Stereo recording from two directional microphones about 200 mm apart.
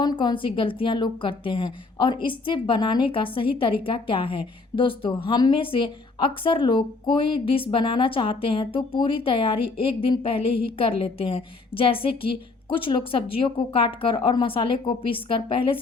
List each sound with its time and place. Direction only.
0.0 s a woman's voice: 20° left (ahead or behind)